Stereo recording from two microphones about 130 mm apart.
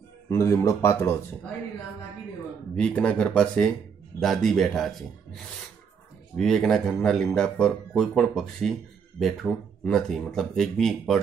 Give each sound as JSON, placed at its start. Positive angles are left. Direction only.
{"t": 0.3, "sound": "speech", "side_deg": 20}
{"t": 2.7, "sound": "speech", "side_deg": 10}